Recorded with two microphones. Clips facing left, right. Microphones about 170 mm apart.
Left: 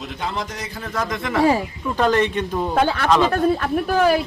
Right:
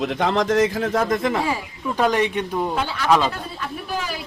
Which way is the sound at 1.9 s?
10° right (ahead or behind).